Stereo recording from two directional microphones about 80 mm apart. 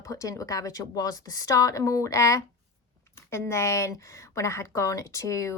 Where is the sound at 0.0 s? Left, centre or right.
Left.